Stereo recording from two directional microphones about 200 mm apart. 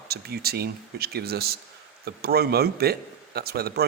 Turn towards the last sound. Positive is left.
turn(degrees=-50)  # may be behind; listen again after turning